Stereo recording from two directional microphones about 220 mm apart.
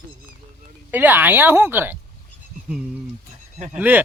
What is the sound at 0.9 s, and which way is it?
Speech, 10° right (ahead or behind).